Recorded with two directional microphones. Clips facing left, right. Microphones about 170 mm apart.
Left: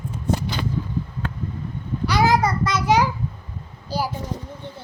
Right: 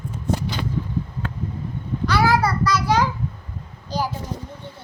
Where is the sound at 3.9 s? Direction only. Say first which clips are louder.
Even; 10° left (ahead or behind).